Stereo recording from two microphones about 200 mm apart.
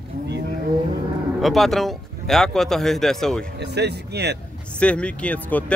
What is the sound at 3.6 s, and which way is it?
Speech, 55° right (ahead or behind).